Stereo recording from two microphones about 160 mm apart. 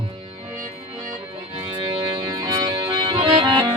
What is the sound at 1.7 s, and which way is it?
Music, 30° right (ahead or behind).